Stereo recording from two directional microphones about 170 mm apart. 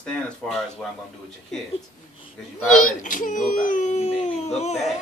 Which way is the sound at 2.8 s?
50° left (ahead or behind).